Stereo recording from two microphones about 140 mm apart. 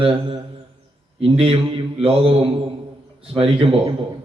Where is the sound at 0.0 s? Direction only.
40° right (ahead or behind).